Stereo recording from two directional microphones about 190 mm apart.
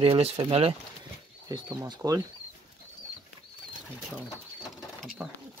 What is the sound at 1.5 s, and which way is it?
Speech, 20° right (ahead or behind).